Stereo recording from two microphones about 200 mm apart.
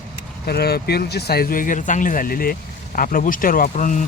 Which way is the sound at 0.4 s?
50° left (ahead or behind).